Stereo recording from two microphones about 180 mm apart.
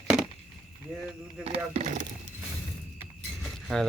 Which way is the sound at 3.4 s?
Centre (ahead or behind).